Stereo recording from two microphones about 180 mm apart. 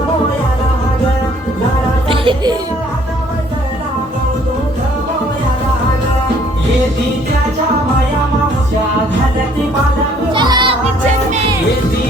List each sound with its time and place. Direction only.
2.0 s music: 25° right (ahead or behind)
10.3 s music: 25° right (ahead or behind)